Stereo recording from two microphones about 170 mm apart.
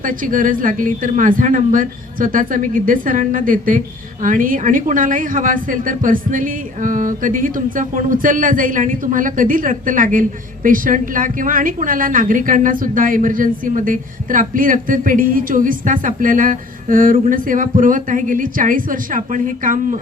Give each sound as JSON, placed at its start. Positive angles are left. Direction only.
{"t": 0.0, "sound": "speech", "side_deg": -55}